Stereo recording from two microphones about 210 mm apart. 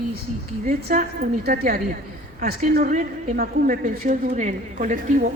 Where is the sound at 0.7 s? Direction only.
40° right (ahead or behind).